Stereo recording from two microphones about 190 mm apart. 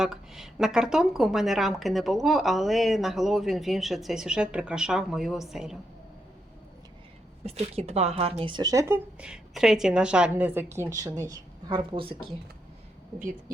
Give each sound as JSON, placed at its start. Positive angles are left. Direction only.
{"t": 0.0, "sound": "a woman's voice", "side_deg": 0}
{"t": 7.4, "sound": "speech", "side_deg": -30}